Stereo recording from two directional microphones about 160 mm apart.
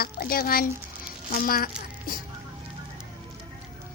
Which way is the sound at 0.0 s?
70° left (ahead or behind).